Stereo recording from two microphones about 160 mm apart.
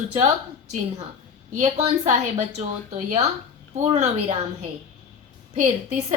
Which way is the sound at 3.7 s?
45° right (ahead or behind).